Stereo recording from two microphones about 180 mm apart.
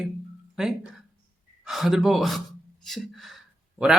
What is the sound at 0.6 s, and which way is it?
Speech, centre (ahead or behind).